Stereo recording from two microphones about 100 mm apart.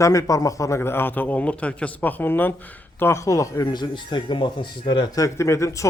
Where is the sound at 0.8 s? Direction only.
20° left (ahead or behind).